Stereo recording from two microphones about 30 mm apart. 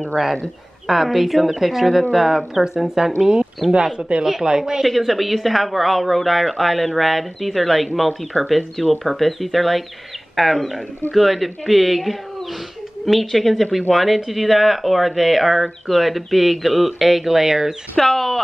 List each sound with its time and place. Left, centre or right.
0.8 s speech: centre
3.6 s speech: centre
4.2 s speech: centre
4.8 s speech: centre
17.9 s speech: centre